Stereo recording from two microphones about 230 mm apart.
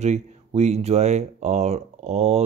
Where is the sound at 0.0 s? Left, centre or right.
Right.